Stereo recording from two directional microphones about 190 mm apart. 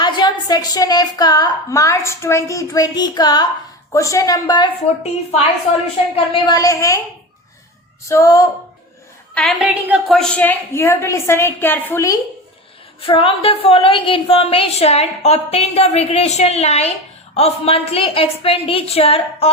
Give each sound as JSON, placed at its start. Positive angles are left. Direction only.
{"t": 0.0, "sound": "a woman's voice", "side_deg": 20}
{"t": 6.1, "sound": "a woman's voice", "side_deg": 25}
{"t": 8.0, "sound": "a woman's voice", "side_deg": 15}
{"t": 9.3, "sound": "a woman's voice", "side_deg": 0}
{"t": 13.0, "sound": "a woman's voice", "side_deg": 25}